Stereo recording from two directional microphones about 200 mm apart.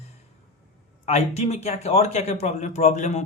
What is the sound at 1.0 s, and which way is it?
Speech, 35° left (ahead or behind).